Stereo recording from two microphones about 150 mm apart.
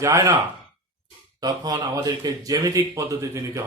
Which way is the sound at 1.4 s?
25° right (ahead or behind).